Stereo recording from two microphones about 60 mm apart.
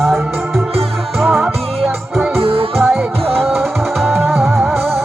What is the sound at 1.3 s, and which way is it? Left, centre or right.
Music, centre.